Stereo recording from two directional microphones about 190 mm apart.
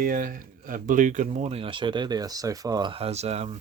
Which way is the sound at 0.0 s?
50° right (ahead or behind).